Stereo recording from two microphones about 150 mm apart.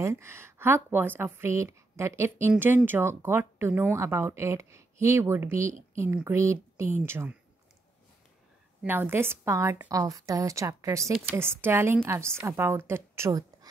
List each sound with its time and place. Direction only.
0.0 s speech: 20° right (ahead or behind)
8.8 s a woman's voice: 15° right (ahead or behind)